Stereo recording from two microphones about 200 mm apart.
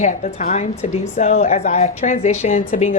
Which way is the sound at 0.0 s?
35° left (ahead or behind).